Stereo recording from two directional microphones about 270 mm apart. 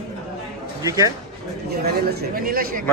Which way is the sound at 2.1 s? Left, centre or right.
Right.